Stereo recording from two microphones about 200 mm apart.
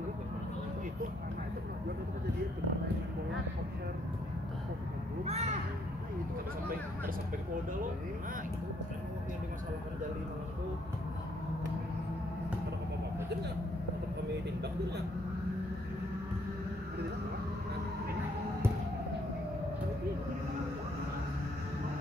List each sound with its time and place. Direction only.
5.2 s crow: 30° right (ahead or behind)